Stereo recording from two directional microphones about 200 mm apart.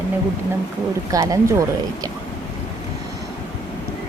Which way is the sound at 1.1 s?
15° right (ahead or behind).